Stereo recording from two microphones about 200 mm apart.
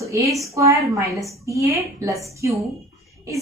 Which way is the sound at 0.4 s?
15° right (ahead or behind).